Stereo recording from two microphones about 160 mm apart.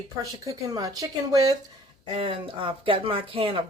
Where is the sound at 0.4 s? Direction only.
25° right (ahead or behind).